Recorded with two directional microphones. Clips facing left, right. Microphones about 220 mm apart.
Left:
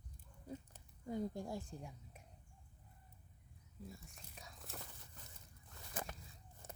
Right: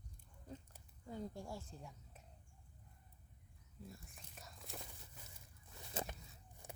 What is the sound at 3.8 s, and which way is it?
Whispering, centre (ahead or behind).